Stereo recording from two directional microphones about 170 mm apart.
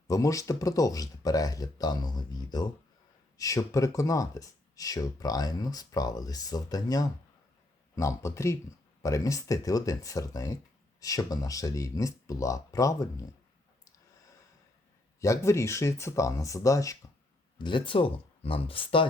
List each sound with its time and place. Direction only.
0.1 s speech: 20° left (ahead or behind)
15.2 s speech: 15° left (ahead or behind)